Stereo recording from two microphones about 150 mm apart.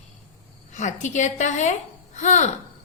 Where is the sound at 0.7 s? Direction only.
55° left (ahead or behind).